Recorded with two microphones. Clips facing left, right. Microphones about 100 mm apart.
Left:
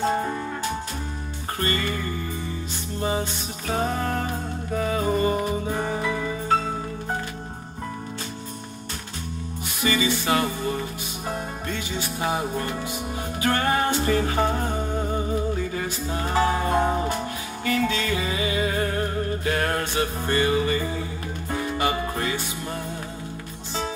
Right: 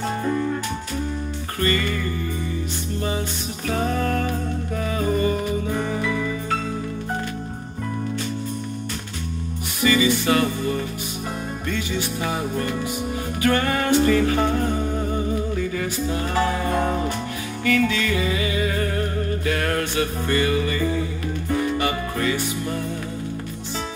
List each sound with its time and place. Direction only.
0.0 s music: 30° left (ahead or behind)
1.6 s music: 35° left (ahead or behind)
3.1 s music: 30° left (ahead or behind)
9.8 s music: 30° left (ahead or behind)
12.2 s music: 30° left (ahead or behind)
13.4 s music: 35° left (ahead or behind)
14.5 s humming: 30° left (ahead or behind)
15.5 s music: 35° left (ahead or behind)